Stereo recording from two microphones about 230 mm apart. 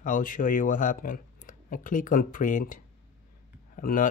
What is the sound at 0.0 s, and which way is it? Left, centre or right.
Speech, left.